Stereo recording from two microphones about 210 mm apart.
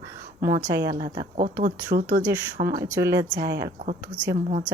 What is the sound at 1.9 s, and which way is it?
Speech, 45° right (ahead or behind).